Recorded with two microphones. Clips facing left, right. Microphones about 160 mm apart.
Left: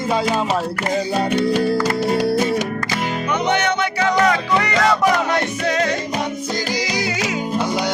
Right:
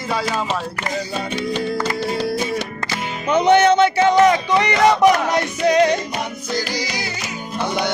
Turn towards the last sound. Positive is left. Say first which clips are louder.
# right 5 dB
turn(degrees=-20)  # may be behind; listen again after turning